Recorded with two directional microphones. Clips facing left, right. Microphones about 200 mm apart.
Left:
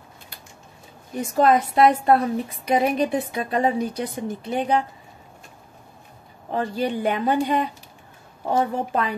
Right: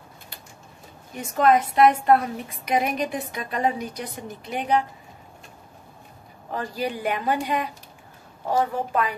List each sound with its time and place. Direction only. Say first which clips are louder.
1.1 s a woman's voice: left 1 dB; 35° left (ahead or behind)
6.5 s a woman's voice: left 4 dB; 25° left (ahead or behind)